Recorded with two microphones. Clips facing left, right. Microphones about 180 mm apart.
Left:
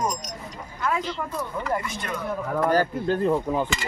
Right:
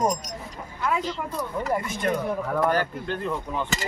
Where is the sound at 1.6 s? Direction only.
45° right (ahead or behind).